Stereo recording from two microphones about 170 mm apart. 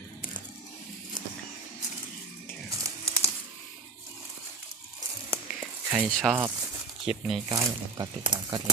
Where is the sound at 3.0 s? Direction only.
15° right (ahead or behind).